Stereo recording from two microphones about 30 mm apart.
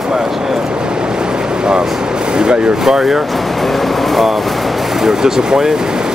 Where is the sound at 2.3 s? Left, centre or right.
Right.